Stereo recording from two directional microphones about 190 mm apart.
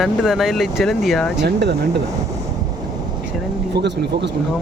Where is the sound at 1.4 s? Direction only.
60° right (ahead or behind).